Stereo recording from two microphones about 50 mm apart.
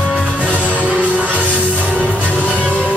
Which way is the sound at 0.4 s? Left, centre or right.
Right.